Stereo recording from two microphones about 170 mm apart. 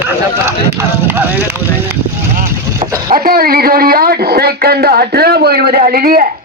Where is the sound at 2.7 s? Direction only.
20° right (ahead or behind).